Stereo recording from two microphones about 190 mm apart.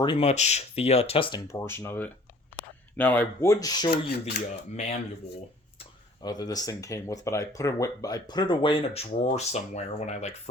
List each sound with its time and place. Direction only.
0.0 s speech: 30° left (ahead or behind)
1.5 s speech: 15° left (ahead or behind)
3.9 s filing: 55° left (ahead or behind)
6.2 s speech: 20° left (ahead or behind); by 10.5 s 35° left (ahead or behind)